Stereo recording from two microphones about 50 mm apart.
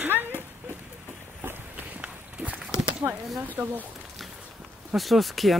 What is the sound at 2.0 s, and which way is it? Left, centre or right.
Run, right.